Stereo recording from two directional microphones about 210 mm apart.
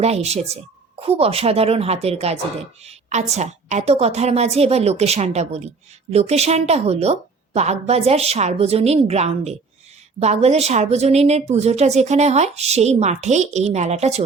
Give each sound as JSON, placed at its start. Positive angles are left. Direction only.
{"t": 0.0, "sound": "a woman's voice", "side_deg": -30}